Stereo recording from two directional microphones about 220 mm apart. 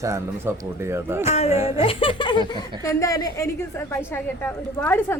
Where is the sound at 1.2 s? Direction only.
30° left (ahead or behind).